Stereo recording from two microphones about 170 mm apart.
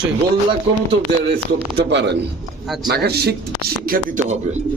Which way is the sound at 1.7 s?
90° right.